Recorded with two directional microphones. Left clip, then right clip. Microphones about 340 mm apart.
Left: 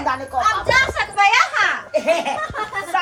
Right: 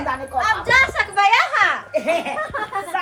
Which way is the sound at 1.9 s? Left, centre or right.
Left.